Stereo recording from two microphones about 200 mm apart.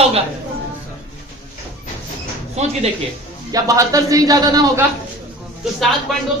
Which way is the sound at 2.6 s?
35° right (ahead or behind).